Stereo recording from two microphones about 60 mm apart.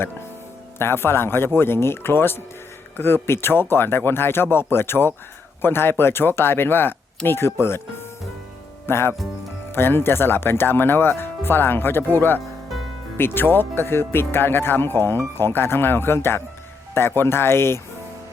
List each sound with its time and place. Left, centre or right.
0.8 s speech: left